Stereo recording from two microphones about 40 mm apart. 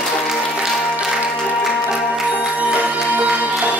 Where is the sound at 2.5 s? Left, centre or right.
Right.